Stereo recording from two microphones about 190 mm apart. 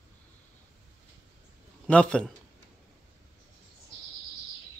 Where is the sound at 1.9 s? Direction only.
5° left (ahead or behind).